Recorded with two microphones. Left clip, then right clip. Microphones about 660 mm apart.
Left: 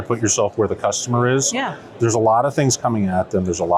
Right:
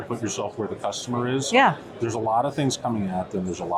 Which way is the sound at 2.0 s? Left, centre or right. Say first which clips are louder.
Left 8 dB; left.